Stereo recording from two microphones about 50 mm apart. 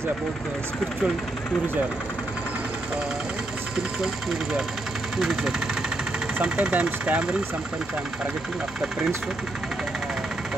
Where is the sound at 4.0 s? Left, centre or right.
Centre.